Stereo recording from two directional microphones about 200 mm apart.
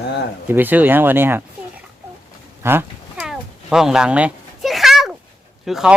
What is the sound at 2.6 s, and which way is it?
Cat, 10° right (ahead or behind).